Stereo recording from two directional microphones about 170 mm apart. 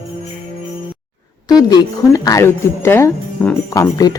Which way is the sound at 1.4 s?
20° left (ahead or behind).